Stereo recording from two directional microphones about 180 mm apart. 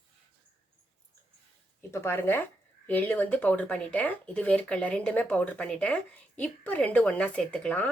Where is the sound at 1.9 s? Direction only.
10° left (ahead or behind).